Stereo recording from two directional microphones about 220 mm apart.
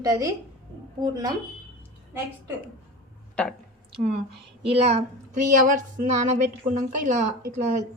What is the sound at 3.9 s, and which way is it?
A woman's voice, 30° right (ahead or behind).